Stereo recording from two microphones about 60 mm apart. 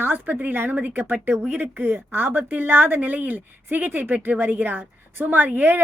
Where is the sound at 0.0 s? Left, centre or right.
Right.